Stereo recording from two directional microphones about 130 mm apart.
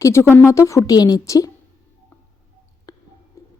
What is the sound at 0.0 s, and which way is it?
Speech, 20° left (ahead or behind).